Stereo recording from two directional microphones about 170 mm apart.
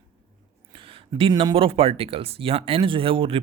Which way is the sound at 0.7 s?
30° right (ahead or behind).